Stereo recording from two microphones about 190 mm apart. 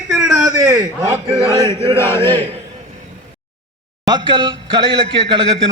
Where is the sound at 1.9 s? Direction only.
15° left (ahead or behind).